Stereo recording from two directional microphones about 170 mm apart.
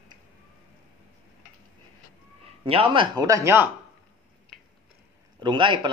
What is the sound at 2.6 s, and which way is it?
A man's voice, 30° right (ahead or behind).